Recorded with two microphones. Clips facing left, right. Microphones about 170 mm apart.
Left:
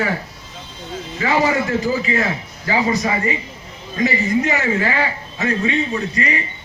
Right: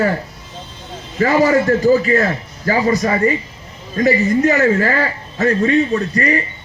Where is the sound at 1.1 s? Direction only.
40° right (ahead or behind).